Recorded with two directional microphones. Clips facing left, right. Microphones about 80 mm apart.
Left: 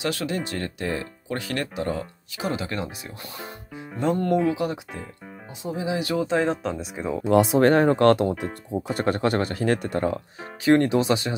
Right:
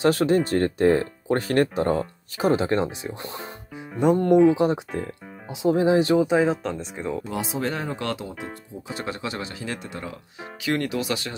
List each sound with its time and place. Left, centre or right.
0.0 s speech: right
3.1 s speech: centre
5.6 s speech: right
5.9 s speech: right
6.2 s speech: centre
7.5 s speech: left